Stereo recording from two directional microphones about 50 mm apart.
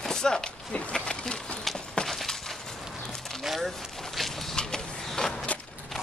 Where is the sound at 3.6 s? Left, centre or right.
Centre.